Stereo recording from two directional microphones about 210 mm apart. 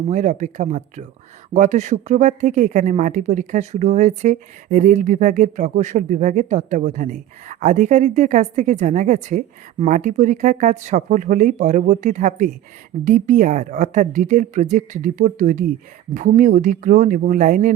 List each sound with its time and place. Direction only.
0.1 s speech: 35° right (ahead or behind)